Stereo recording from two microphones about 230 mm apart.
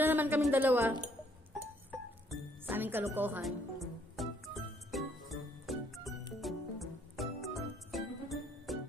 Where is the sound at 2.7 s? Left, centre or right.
Centre.